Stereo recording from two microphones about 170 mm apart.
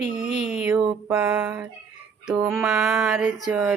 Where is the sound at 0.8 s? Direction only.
20° right (ahead or behind).